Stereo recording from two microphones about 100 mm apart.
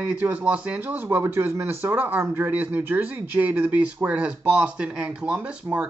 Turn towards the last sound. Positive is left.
turn(degrees=-10)  # may be behind; listen again after turning